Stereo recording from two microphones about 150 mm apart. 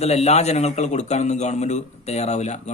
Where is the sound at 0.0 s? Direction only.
45° left (ahead or behind).